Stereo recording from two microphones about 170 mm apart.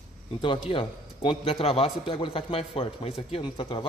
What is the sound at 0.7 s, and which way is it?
Speech, 30° left (ahead or behind).